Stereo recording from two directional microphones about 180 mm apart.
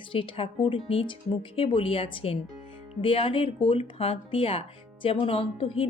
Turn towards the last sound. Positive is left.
turn(degrees=30)  # may be behind; listen again after turning